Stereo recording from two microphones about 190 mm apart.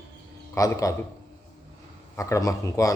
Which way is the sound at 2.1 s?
15° left (ahead or behind).